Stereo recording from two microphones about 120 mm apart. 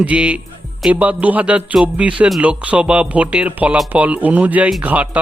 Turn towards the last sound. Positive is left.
turn(degrees=-10)  # may be behind; listen again after turning